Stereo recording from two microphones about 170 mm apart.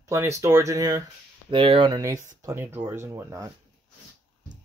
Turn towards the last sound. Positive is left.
turn(degrees=-15)  # may be behind; listen again after turning